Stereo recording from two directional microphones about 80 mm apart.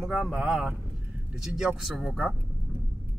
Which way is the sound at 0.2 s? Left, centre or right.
Centre.